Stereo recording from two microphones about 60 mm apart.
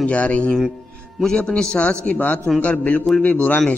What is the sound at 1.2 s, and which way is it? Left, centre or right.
A man's voice, centre.